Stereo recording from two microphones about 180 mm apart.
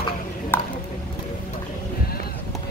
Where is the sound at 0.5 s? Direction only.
10° left (ahead or behind).